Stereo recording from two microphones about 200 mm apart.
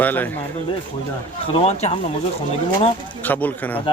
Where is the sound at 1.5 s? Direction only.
30° left (ahead or behind).